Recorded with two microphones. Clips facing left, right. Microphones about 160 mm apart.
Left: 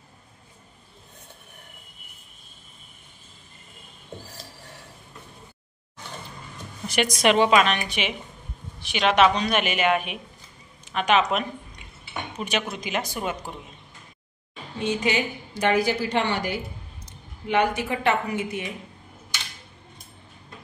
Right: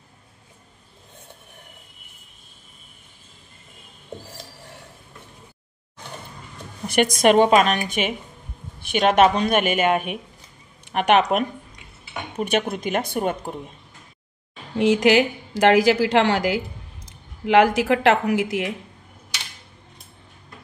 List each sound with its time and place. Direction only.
6.9 s speech: 50° right (ahead or behind)
10.9 s speech: 60° right (ahead or behind)
14.8 s a woman's voice: 90° right